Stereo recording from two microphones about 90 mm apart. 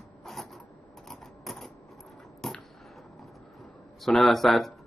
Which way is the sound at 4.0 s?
Centre (ahead or behind).